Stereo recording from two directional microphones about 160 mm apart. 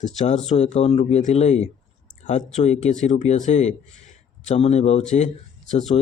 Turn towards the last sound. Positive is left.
turn(degrees=45)  # may be behind; listen again after turning